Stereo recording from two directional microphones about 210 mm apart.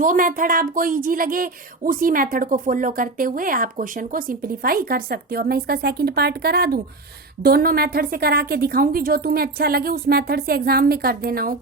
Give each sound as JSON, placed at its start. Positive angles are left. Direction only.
{"t": 0.0, "sound": "a woman's voice", "side_deg": -40}